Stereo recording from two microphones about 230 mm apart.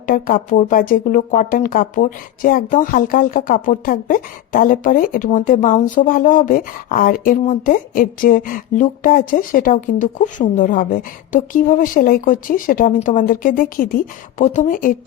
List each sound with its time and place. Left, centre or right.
0.1 s speech: left